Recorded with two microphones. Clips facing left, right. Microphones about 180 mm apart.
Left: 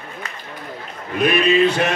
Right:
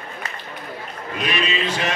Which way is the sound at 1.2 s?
55° left (ahead or behind).